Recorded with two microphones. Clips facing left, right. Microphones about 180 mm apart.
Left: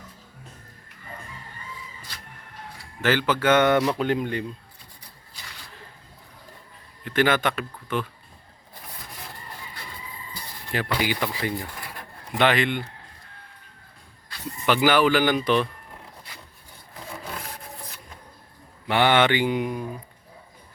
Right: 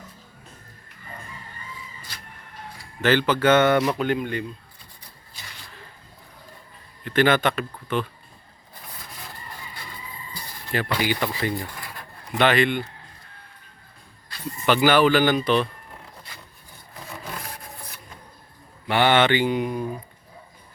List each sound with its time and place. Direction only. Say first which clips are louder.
3.0 s speech: right 3 dB; 10° left (ahead or behind)
3.8 s speech: even; 10° right (ahead or behind)
4.0 s speech: even; 30° left (ahead or behind)
7.0 s speech: right 2 dB; 10° left (ahead or behind)
10.7 s speech: right 1 dB; 15° left (ahead or behind)
14.7 s speech: right 2 dB; 15° left (ahead or behind)
18.9 s speech: right 1 dB; 15° left (ahead or behind)